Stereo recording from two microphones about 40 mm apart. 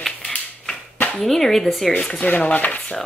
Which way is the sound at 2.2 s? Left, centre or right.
Left.